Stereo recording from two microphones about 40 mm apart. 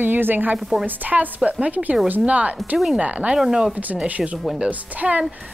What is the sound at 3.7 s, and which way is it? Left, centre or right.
A woman's voice, right.